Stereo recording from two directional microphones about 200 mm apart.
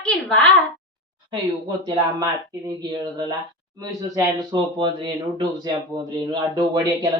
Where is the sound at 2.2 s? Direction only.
20° right (ahead or behind).